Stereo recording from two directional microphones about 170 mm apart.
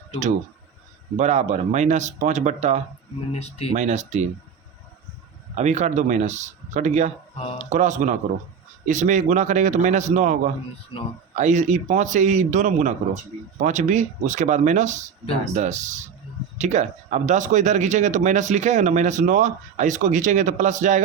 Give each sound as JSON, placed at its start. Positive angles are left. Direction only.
{"t": 1.1, "sound": "speech", "side_deg": -45}
{"t": 3.3, "sound": "speech", "side_deg": 40}
{"t": 3.8, "sound": "speech", "side_deg": -45}
{"t": 5.5, "sound": "speech", "side_deg": -40}
{"t": 10.9, "sound": "speech", "side_deg": 30}
{"t": 11.3, "sound": "speech", "side_deg": -45}